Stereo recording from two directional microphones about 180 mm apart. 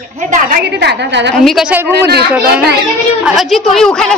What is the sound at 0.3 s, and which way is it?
A woman's voice, 55° right (ahead or behind).